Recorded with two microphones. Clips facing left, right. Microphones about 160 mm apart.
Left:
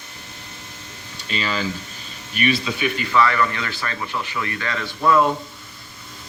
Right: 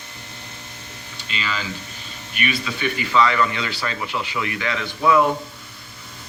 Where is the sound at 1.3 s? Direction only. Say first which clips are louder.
Left 4 dB; 40° left (ahead or behind).